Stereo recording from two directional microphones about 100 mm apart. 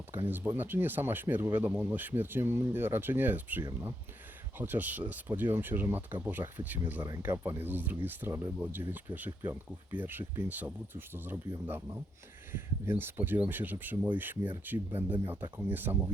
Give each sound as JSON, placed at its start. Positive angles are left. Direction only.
{"t": 0.1, "sound": "speech", "side_deg": -20}